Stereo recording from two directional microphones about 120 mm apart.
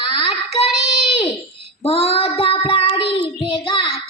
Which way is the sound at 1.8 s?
55° left (ahead or behind).